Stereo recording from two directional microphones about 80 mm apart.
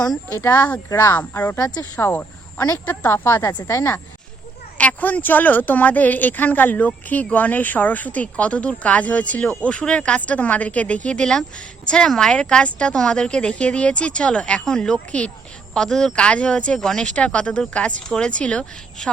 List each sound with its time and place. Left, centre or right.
0.3 s speech: left
4.8 s a woman's voice: centre